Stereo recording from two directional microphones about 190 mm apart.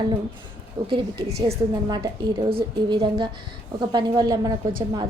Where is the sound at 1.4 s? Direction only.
25° right (ahead or behind).